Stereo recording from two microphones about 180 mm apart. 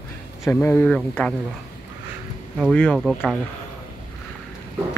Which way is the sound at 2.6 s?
5° left (ahead or behind).